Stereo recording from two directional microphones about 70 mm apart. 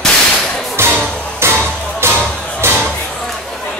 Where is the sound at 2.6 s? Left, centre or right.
Right.